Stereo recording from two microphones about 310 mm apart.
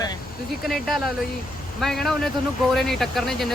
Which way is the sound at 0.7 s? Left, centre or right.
Centre.